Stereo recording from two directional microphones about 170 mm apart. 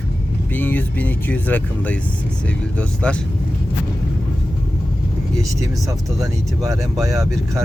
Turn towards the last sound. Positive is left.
turn(degrees=-20)  # may be behind; listen again after turning